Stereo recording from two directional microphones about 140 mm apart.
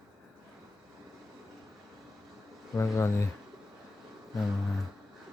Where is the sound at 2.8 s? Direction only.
20° left (ahead or behind).